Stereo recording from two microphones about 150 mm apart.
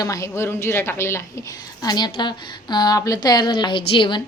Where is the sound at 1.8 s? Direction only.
25° left (ahead or behind).